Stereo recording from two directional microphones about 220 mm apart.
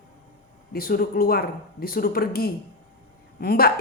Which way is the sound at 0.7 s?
45° left (ahead or behind).